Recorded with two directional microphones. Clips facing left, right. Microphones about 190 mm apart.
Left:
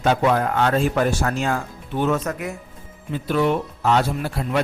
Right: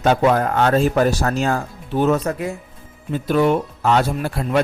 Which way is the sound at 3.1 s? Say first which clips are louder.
Right 3 dB; 45° right (ahead or behind).